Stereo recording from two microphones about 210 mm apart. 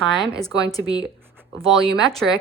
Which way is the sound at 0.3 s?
15° left (ahead or behind).